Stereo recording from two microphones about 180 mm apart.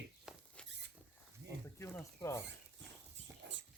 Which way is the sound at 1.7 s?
15° left (ahead or behind).